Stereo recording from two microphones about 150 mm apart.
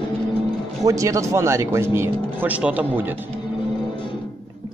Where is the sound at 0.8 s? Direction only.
20° right (ahead or behind).